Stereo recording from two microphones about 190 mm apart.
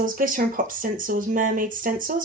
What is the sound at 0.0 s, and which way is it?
Speech, 45° right (ahead or behind).